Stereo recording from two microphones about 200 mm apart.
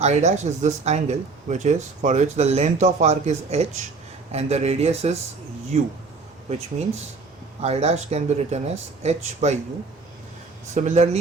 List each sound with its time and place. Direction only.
0.0 s speech: 35° right (ahead or behind)
10.8 s speech: 35° right (ahead or behind)